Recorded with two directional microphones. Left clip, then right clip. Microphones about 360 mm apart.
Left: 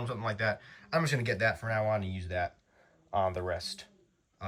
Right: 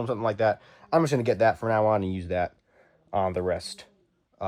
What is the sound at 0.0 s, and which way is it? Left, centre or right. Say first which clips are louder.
Speech: right 8 dB; centre.